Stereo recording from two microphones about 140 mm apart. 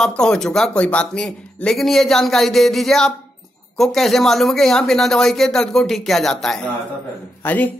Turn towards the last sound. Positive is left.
turn(degrees=10)  # may be behind; listen again after turning